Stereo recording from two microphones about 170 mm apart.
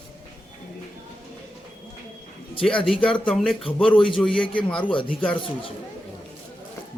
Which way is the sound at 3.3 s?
Centre (ahead or behind).